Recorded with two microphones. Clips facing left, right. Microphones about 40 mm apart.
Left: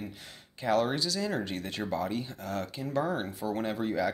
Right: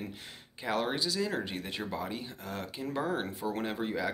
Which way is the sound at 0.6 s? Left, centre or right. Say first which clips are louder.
Left 4 dB; centre.